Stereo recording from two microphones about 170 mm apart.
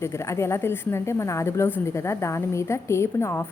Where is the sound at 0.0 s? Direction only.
15° left (ahead or behind).